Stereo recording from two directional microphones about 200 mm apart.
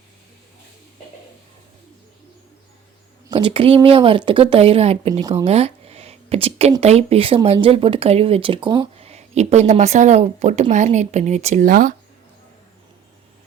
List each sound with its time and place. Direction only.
3.2 s speech: 25° right (ahead or behind)
5.2 s speech: 20° right (ahead or behind)
5.5 s speech: 30° right (ahead or behind)